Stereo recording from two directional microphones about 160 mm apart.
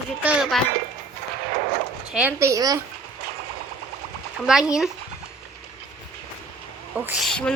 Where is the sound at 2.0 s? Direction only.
5° right (ahead or behind).